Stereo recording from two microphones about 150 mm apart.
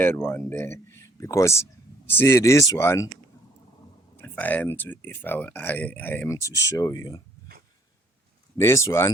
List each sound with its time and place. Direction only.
0.0 s speech: 15° left (ahead or behind)
4.2 s speech: 10° left (ahead or behind)
8.5 s speech: 20° left (ahead or behind)